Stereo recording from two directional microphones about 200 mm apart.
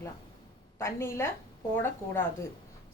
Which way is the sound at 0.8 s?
15° left (ahead or behind).